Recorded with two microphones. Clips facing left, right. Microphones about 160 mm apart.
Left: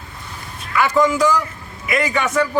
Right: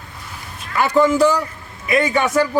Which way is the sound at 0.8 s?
35° right (ahead or behind).